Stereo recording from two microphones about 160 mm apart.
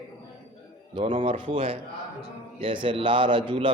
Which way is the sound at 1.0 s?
40° right (ahead or behind).